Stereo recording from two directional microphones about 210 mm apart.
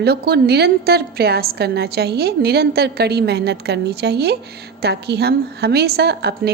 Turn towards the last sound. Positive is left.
turn(degrees=-50)  # may be behind; listen again after turning